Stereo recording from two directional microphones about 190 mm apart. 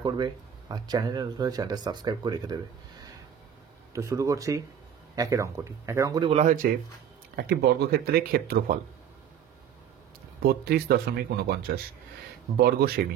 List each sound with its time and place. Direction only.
0.0 s speech: 20° right (ahead or behind)
6.3 s speech: 45° right (ahead or behind)
7.3 s speech: 55° right (ahead or behind)
10.4 s speech: 55° right (ahead or behind)